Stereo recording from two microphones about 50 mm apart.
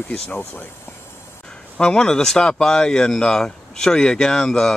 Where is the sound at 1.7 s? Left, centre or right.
Centre.